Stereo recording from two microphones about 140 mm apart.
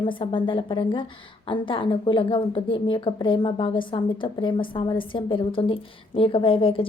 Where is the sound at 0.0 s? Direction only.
35° left (ahead or behind).